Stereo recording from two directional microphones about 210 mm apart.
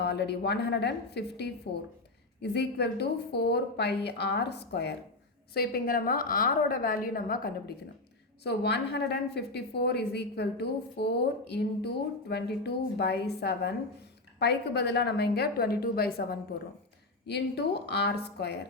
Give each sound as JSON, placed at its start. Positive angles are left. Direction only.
{"t": 0.0, "sound": "a woman's voice", "side_deg": 55}